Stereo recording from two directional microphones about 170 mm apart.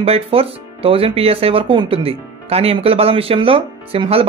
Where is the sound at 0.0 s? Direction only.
35° right (ahead or behind).